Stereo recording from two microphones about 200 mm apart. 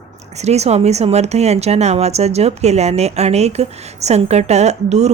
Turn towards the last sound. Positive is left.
turn(degrees=-35)  # may be behind; listen again after turning